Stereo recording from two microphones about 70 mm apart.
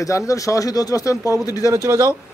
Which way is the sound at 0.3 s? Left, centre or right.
Left.